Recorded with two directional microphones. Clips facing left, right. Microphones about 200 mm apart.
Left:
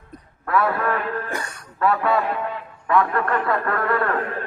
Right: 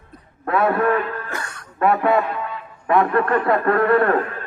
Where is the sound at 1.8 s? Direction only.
20° right (ahead or behind).